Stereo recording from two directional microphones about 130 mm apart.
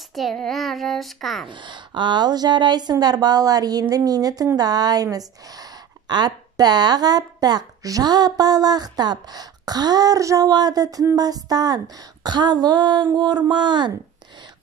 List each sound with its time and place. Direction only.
0.1 s a child's voice: centre (ahead or behind)
1.5 s speech: 35° right (ahead or behind)